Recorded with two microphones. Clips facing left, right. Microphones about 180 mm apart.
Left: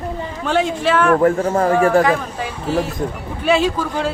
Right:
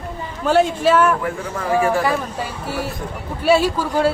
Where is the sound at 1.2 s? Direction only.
55° left (ahead or behind).